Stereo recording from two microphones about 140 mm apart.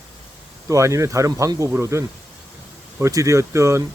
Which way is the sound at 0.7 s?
20° right (ahead or behind).